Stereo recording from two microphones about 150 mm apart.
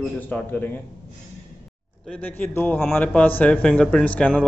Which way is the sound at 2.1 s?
10° left (ahead or behind).